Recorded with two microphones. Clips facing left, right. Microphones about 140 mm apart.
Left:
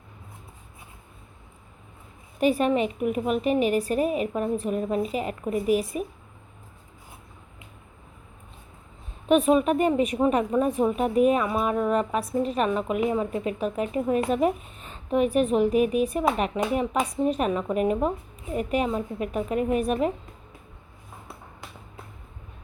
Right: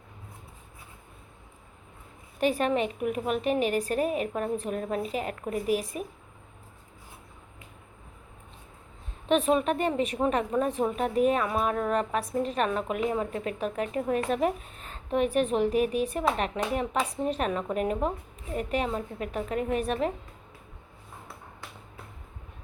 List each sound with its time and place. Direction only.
2.4 s a woman's voice: 5° left (ahead or behind)
9.3 s a woman's voice: 10° left (ahead or behind)
15.7 s speech: 40° right (ahead or behind)
16.1 s a woman's voice: 10° left (ahead or behind)